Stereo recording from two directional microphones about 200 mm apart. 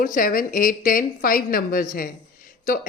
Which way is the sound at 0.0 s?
45° left (ahead or behind).